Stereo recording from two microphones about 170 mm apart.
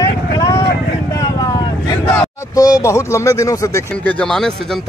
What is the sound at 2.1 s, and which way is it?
Speech, 20° left (ahead or behind).